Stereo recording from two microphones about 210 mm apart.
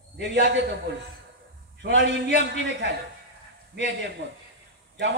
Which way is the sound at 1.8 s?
55° right (ahead or behind).